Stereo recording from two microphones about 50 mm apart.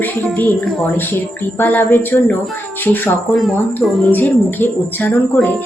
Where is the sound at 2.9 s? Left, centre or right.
Left.